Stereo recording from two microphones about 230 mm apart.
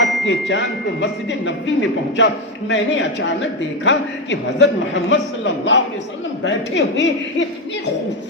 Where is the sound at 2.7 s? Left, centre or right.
Left.